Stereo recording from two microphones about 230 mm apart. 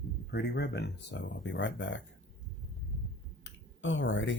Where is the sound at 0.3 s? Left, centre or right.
Left.